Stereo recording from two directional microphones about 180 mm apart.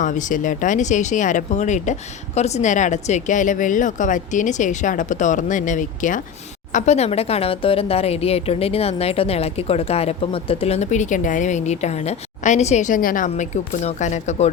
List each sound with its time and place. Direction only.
0.0 s a woman's voice: 45° left (ahead or behind)